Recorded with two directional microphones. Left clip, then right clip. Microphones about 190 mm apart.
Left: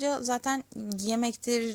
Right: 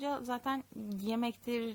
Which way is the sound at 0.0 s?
20° left (ahead or behind).